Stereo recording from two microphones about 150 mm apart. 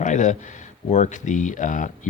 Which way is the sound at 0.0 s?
55° left (ahead or behind).